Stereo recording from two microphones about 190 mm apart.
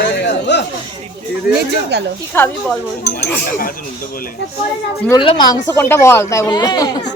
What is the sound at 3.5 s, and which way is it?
Speech, 45° left (ahead or behind).